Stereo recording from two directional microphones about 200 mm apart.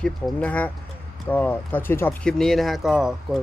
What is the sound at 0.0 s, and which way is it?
Speech, 5° left (ahead or behind).